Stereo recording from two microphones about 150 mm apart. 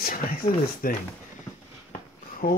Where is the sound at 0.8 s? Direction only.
75° left (ahead or behind).